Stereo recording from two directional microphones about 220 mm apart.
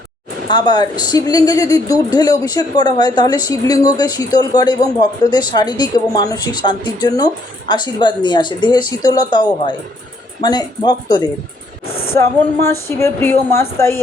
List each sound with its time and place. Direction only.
0.4 s speech: 20° left (ahead or behind)
12.5 s speech: 10° left (ahead or behind)